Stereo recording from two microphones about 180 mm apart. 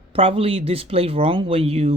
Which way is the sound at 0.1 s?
30° right (ahead or behind).